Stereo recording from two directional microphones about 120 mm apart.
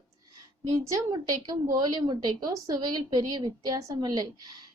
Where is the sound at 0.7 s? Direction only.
30° right (ahead or behind).